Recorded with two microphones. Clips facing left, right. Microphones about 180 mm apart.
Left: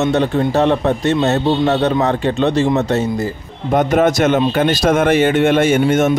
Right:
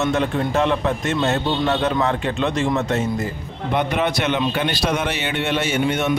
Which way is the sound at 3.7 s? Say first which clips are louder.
Left 7 dB; 45° left (ahead or behind).